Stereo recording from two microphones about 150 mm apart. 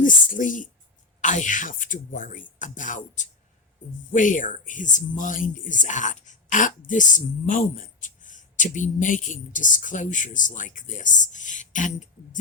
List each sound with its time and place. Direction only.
0.0 s speech: 60° left (ahead or behind)